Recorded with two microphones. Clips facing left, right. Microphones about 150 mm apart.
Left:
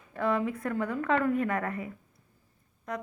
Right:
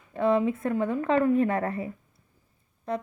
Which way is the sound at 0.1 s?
25° right (ahead or behind).